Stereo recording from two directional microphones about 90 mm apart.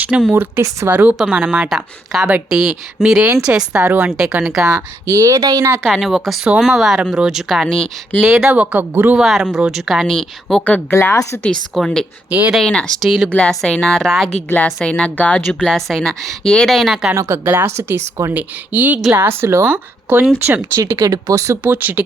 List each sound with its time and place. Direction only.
0.3 s speech: 25° right (ahead or behind)
4.6 s speech: 35° right (ahead or behind)
5.8 s speech: centre (ahead or behind)
8.2 s speech: 10° right (ahead or behind)
9.1 s speech: 5° right (ahead or behind)
11.7 s speech: centre (ahead or behind)
12.3 s speech: 20° right (ahead or behind)
12.6 s speech: 10° left (ahead or behind)
13.1 s speech: 5° right (ahead or behind)
13.3 s speech: 5° left (ahead or behind)
15.7 s speech: 5° left (ahead or behind)
17.2 s speech: 30° right (ahead or behind)
21.0 s speech: 40° right (ahead or behind)
21.6 s speech: 20° right (ahead or behind)